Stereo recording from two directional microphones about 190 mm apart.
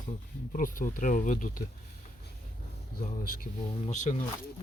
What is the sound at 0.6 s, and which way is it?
Speech, 45° left (ahead or behind).